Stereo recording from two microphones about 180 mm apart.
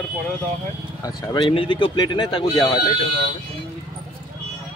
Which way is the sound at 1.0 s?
25° left (ahead or behind).